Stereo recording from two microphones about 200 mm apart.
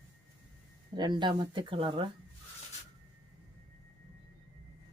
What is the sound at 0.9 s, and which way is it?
Speech, 20° right (ahead or behind).